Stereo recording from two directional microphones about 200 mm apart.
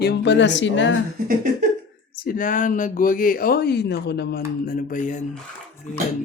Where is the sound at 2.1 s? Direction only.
45° left (ahead or behind).